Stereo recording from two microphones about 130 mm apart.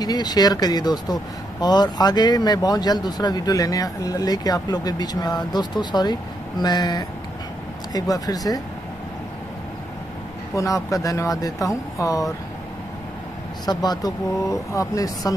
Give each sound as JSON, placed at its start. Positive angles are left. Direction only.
{"t": 0.0, "sound": "speech", "side_deg": 30}
{"t": 10.5, "sound": "speech", "side_deg": 25}
{"t": 13.7, "sound": "speech", "side_deg": 30}